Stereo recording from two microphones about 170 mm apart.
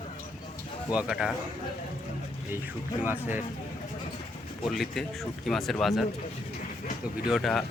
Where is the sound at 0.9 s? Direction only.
5° right (ahead or behind).